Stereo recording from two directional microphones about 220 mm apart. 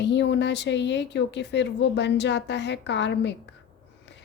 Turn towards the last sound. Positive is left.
turn(degrees=50)  # may be behind; listen again after turning